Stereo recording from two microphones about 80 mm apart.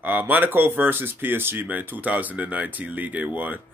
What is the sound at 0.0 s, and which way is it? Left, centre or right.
Speech, right.